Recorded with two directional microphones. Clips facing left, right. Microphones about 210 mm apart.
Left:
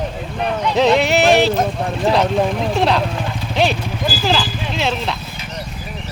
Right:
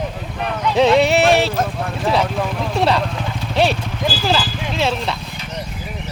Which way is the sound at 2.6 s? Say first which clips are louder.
Left 1 dB; centre (ahead or behind).